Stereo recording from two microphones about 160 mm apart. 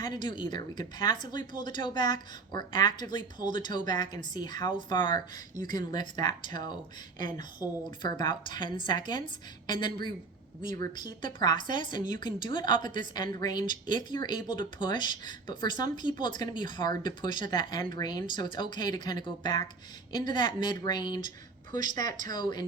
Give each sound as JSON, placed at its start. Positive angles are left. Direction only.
{"t": 0.0, "sound": "speech", "side_deg": 25}
{"t": 21.2, "sound": "a sound", "side_deg": -50}
{"t": 22.3, "sound": "speech", "side_deg": 25}